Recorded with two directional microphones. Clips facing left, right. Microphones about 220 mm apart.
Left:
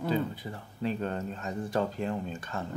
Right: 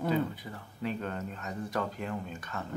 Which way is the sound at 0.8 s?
30° left (ahead or behind).